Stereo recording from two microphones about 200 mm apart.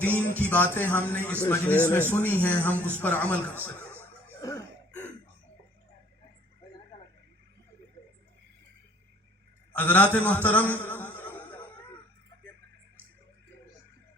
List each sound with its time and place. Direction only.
0.0 s a man's voice: 10° left (ahead or behind)
4.0 s chuckle: 15° left (ahead or behind)
9.7 s a man's voice: 10° left (ahead or behind)
10.7 s music: 10° left (ahead or behind)